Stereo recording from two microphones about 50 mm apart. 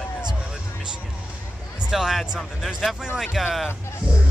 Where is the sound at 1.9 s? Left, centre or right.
Centre.